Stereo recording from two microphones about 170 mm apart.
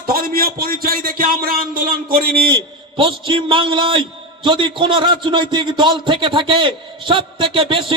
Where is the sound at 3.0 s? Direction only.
30° right (ahead or behind).